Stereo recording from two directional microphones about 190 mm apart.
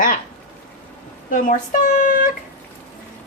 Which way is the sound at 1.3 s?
40° left (ahead or behind).